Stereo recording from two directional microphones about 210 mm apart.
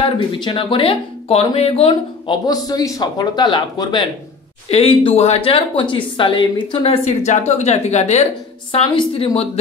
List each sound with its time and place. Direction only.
0.0 s speech: 25° left (ahead or behind)